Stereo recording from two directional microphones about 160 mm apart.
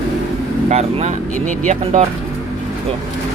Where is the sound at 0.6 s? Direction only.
45° right (ahead or behind).